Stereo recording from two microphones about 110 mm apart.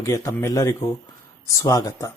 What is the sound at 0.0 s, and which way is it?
Speech, 35° left (ahead or behind).